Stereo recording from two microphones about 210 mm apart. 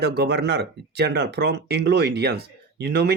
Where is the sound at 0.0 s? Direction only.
50° right (ahead or behind).